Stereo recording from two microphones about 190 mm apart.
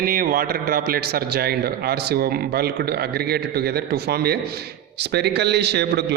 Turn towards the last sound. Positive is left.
turn(degrees=-60)  # may be behind; listen again after turning